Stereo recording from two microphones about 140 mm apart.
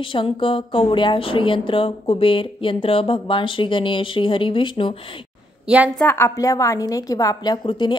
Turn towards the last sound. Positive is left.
turn(degrees=30)  # may be behind; listen again after turning